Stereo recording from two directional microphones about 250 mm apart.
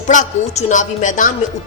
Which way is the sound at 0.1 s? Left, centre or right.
Left.